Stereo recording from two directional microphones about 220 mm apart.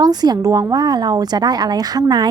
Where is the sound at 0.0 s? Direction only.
20° right (ahead or behind).